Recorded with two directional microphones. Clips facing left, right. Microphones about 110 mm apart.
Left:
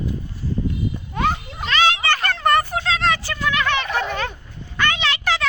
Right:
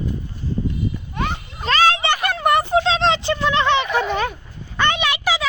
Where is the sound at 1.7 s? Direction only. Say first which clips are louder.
Right 2 dB; 40° right (ahead or behind).